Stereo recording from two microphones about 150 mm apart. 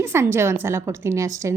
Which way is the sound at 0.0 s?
15° right (ahead or behind).